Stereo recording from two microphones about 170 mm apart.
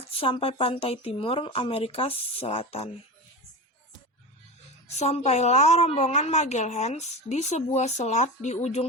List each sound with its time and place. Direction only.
0.1 s a woman's voice: 35° left (ahead or behind)
4.9 s a woman's voice: 40° left (ahead or behind)